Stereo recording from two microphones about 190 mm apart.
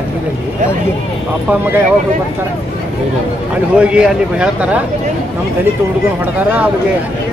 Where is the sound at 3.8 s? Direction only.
5° right (ahead or behind).